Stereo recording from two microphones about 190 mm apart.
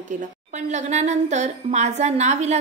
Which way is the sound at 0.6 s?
35° right (ahead or behind).